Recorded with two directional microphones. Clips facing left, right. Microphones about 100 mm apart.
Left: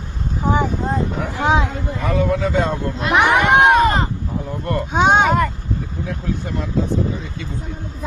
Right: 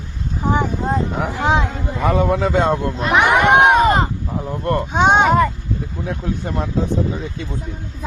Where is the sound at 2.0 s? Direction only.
30° right (ahead or behind).